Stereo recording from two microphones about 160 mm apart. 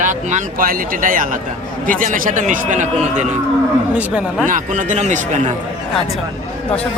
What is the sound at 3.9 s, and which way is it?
Speech, 10° right (ahead or behind).